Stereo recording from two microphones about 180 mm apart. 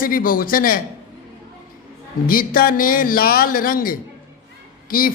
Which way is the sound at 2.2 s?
50° left (ahead or behind).